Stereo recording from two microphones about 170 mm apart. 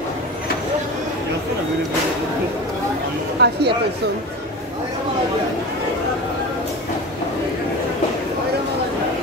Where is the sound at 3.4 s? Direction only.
85° right.